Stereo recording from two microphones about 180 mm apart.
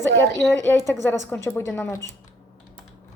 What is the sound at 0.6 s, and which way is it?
A woman's voice, 15° left (ahead or behind).